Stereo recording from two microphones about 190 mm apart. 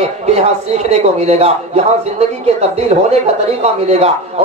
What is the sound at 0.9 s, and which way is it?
A man's voice, 35° right (ahead or behind).